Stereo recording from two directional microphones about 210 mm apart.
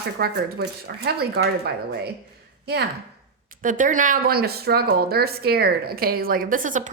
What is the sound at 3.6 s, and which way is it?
A woman's voice, 40° right (ahead or behind).